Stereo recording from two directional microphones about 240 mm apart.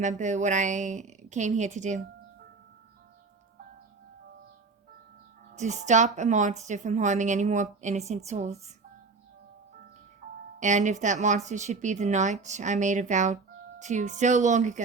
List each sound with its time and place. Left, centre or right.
0.0 s speech: right
5.5 s speech: right
10.2 s music: right
10.6 s speech: right